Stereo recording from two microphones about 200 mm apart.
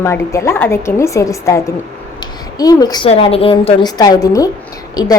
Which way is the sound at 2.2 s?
20° left (ahead or behind).